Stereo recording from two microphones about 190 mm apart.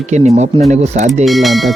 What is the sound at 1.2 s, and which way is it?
Speech, centre (ahead or behind).